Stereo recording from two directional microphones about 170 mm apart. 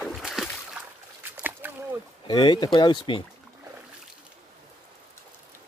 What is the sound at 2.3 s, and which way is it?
Speech, 25° left (ahead or behind).